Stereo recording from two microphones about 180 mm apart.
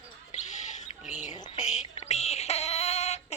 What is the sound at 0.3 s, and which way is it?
Bird, 40° left (ahead or behind).